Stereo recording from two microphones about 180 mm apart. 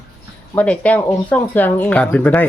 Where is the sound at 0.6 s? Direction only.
10° left (ahead or behind).